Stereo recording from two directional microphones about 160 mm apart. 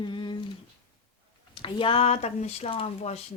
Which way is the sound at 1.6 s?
35° left (ahead or behind).